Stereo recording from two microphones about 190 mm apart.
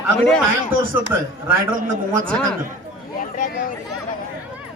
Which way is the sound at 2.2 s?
5° left (ahead or behind).